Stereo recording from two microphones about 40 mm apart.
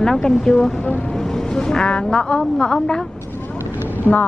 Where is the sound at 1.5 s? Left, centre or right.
Centre.